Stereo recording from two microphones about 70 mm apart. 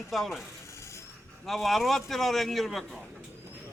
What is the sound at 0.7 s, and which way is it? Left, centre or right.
Mechanisms, left.